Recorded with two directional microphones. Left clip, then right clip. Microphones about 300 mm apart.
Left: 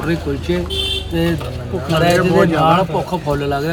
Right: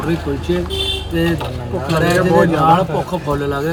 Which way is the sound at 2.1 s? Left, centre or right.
Centre.